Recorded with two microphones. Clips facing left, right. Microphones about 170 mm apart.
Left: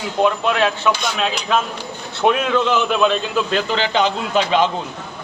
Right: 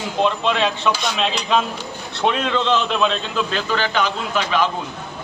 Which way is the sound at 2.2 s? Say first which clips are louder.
Left 3 dB; 10° left (ahead or behind).